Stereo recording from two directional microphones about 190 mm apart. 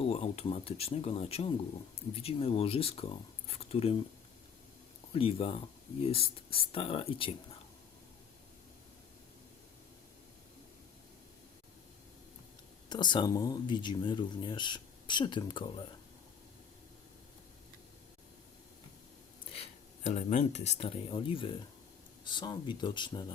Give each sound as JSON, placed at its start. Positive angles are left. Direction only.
{"t": 0.0, "sound": "speech", "side_deg": 30}
{"t": 5.1, "sound": "speech", "side_deg": 30}
{"t": 12.9, "sound": "speech", "side_deg": 25}
{"t": 20.1, "sound": "speech", "side_deg": 40}